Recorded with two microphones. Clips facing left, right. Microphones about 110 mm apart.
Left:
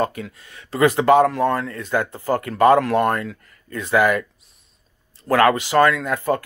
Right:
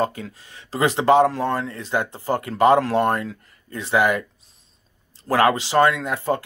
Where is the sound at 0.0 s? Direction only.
30° right (ahead or behind).